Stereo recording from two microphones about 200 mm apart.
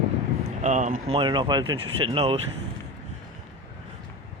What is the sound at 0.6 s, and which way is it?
Speech, 35° right (ahead or behind).